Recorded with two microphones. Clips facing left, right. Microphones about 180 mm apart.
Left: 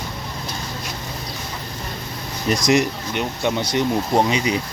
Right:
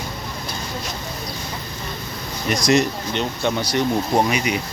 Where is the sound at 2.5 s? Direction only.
20° left (ahead or behind).